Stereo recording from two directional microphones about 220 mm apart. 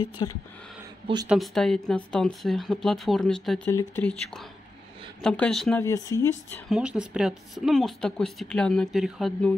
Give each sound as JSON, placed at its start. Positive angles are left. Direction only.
{"t": 0.2, "sound": "speech", "side_deg": 20}
{"t": 1.3, "sound": "speech", "side_deg": 0}
{"t": 5.9, "sound": "speech", "side_deg": 15}
{"t": 6.7, "sound": "speech", "side_deg": -5}